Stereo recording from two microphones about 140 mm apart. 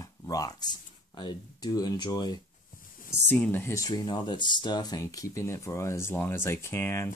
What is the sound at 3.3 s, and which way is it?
Speech, 15° left (ahead or behind).